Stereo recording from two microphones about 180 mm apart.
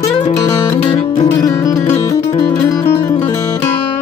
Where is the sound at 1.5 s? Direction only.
20° left (ahead or behind).